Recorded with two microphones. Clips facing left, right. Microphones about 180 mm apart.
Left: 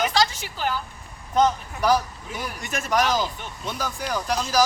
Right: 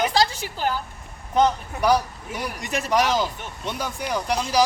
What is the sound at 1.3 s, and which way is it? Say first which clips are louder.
Speech: right 1 dB; 10° right (ahead or behind).